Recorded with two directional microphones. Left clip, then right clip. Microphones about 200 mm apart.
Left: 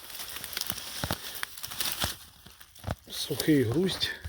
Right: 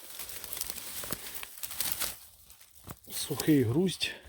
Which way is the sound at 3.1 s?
15° right (ahead or behind).